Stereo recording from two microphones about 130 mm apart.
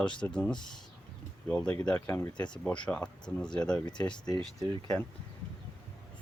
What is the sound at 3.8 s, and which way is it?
Speech, 35° left (ahead or behind).